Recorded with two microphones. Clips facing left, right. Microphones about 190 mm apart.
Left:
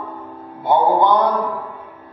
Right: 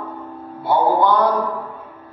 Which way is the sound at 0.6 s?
20° left (ahead or behind).